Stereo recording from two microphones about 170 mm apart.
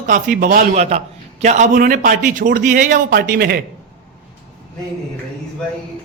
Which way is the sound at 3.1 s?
65° right (ahead or behind).